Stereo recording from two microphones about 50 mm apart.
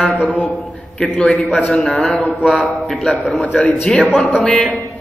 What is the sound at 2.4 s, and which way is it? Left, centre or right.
Speech, centre.